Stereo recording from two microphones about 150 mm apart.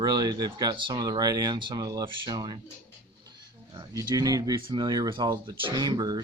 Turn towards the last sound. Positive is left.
turn(degrees=-30)  # may be behind; listen again after turning